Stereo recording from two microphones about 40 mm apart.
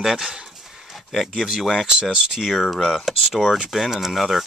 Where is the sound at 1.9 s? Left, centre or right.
Centre.